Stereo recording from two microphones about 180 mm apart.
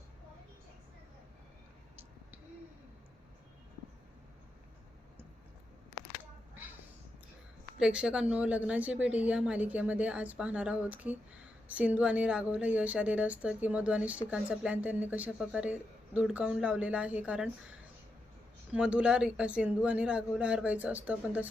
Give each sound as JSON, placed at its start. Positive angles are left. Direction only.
{"t": 6.5, "sound": "a sound", "side_deg": -10}
{"t": 7.8, "sound": "a woman's voice", "side_deg": -5}
{"t": 18.7, "sound": "a woman's voice", "side_deg": -5}